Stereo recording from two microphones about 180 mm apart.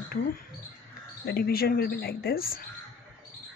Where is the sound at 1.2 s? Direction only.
60° left (ahead or behind).